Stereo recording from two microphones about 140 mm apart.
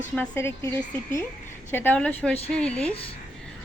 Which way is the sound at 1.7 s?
15° left (ahead or behind).